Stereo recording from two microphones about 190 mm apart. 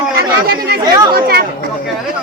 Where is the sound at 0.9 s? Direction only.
20° right (ahead or behind).